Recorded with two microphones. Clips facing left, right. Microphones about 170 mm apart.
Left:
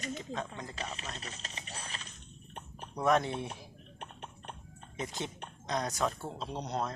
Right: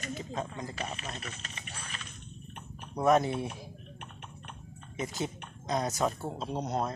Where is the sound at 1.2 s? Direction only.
30° left (ahead or behind).